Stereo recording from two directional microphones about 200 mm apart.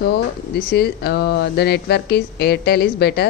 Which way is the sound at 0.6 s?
50° left (ahead or behind).